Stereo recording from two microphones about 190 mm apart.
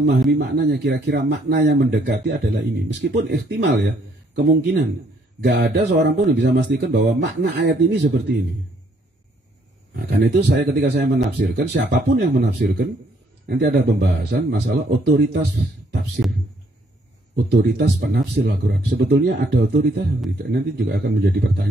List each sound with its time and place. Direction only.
0.3 s speech: 60° right (ahead or behind)
9.9 s speech: 60° right (ahead or behind)
17.5 s speech: 60° right (ahead or behind)